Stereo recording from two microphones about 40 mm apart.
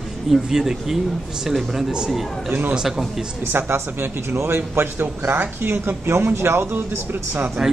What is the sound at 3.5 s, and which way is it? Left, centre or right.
A man's voice, right.